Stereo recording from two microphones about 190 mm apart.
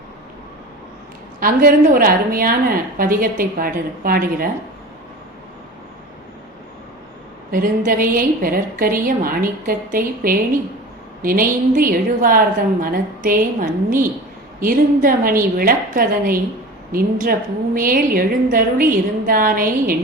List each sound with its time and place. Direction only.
1.4 s a woman's voice: 50° right (ahead or behind)
7.5 s a woman's voice: 45° right (ahead or behind)